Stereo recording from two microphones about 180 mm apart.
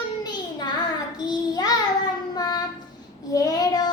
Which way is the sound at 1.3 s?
20° left (ahead or behind).